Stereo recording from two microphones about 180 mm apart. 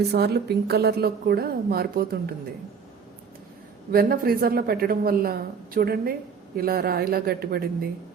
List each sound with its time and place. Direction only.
0.1 s a woman's voice: 65° right (ahead or behind)
3.9 s a woman's voice: 55° right (ahead or behind)